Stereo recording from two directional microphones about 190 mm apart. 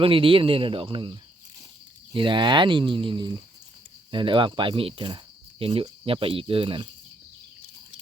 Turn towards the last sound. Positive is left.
turn(degrees=-25)  # may be behind; listen again after turning